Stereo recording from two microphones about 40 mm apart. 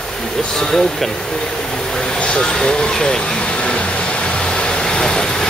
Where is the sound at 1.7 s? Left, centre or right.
Centre.